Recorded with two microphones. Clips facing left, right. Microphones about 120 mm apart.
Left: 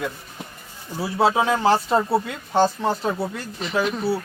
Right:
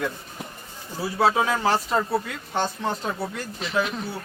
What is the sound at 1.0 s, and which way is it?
Speech, 25° left (ahead or behind).